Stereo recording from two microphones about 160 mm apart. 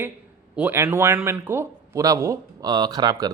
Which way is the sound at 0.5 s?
10° right (ahead or behind).